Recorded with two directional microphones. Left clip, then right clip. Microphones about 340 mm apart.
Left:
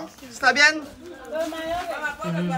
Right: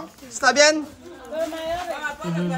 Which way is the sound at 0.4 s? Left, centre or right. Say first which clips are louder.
Right 1 dB; centre.